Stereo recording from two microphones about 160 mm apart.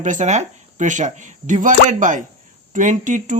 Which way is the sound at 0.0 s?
50° right (ahead or behind).